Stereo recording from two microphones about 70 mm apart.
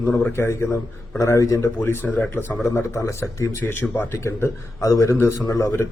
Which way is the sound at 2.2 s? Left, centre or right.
Left.